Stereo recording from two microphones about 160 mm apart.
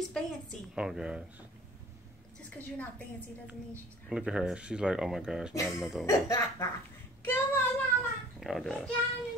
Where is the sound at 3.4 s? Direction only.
5° right (ahead or behind).